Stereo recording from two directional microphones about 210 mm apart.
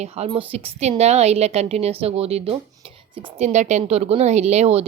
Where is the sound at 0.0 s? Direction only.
30° right (ahead or behind).